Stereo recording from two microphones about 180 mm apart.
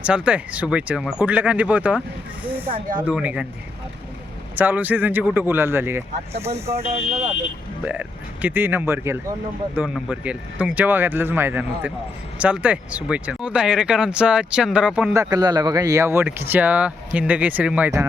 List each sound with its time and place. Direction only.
0.0 s speech: 5° right (ahead or behind)
2.6 s speech: 30° right (ahead or behind)
3.1 s speech: 5° right (ahead or behind)
4.5 s speech: 10° right (ahead or behind)
15.1 s speech: 20° right (ahead or behind)